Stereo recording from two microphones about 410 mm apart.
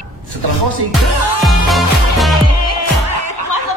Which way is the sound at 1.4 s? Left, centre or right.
Centre.